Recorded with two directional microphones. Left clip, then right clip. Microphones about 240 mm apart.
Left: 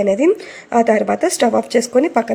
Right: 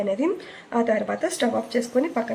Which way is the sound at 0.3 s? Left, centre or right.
Left.